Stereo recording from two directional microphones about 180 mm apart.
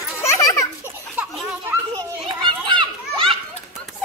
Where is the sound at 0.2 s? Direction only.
15° left (ahead or behind).